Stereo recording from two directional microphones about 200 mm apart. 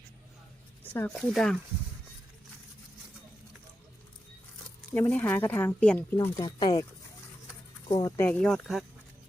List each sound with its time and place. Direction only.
0.9 s speech: 5° left (ahead or behind)
4.9 s speech: 10° left (ahead or behind)
7.9 s speech: 20° left (ahead or behind); by 8.8 s centre (ahead or behind)